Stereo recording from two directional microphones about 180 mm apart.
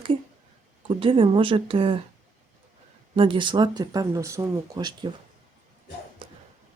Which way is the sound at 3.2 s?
30° right (ahead or behind).